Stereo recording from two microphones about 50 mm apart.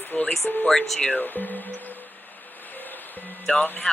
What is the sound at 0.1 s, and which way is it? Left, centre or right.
Speech, centre.